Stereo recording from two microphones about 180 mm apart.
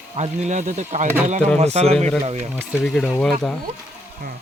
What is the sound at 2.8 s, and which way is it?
Speech, centre (ahead or behind).